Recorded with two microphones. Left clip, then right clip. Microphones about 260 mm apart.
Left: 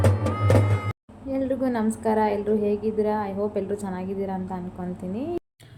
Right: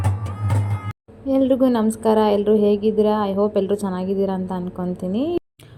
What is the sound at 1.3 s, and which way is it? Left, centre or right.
A woman's voice, right.